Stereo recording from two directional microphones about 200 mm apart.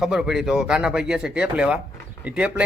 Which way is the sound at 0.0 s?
5° right (ahead or behind).